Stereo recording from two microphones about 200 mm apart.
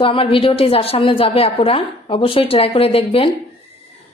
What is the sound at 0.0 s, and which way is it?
A woman's voice, 25° left (ahead or behind).